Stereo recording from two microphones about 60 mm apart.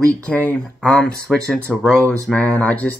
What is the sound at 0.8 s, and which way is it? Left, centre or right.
Speech, centre.